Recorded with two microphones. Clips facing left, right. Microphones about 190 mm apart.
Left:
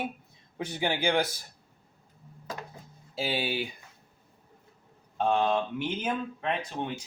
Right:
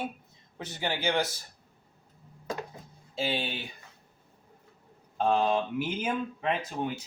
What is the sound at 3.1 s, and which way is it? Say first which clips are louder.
Speech: left 1 dB; 5° left (ahead or behind).